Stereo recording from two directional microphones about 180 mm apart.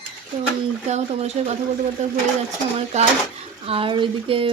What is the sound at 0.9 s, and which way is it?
A woman's voice, 35° right (ahead or behind).